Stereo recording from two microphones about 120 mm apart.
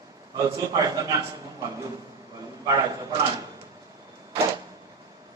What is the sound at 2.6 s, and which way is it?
Speech, 35° right (ahead or behind).